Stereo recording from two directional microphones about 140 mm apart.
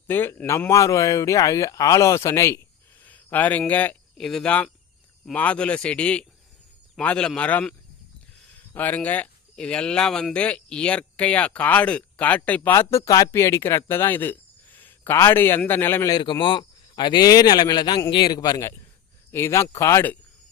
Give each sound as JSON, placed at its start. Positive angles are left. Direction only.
{"t": 0.1, "sound": "speech", "side_deg": 15}
{"t": 3.0, "sound": "a sound", "side_deg": 10}
{"t": 3.7, "sound": "speech", "side_deg": 10}
{"t": 16.1, "sound": "a man's voice", "side_deg": 35}